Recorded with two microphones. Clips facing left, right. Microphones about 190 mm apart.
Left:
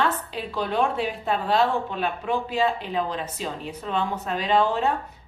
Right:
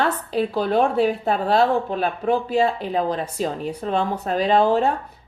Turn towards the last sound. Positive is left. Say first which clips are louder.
# right 5 dB
turn(degrees=-40)  # may be behind; listen again after turning